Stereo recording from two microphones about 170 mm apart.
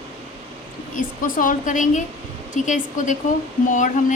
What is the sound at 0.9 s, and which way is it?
Speech, 55° left (ahead or behind).